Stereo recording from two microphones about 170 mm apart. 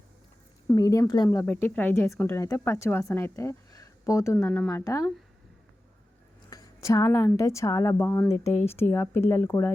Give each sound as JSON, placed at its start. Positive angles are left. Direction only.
{"t": 0.8, "sound": "speech", "side_deg": 20}
{"t": 6.5, "sound": "speech", "side_deg": 20}